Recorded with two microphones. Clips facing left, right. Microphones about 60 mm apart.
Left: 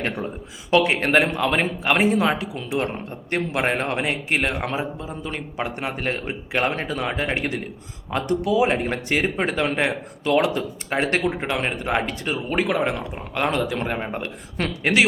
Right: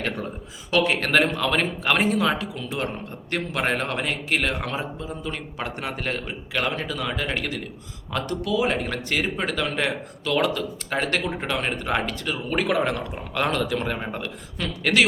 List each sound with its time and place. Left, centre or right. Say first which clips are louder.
0.7 s a man's voice: left 3 dB; left
2.0 s a man's voice: left 2 dB; left
14.6 s a woman's voice: left 4 dB; left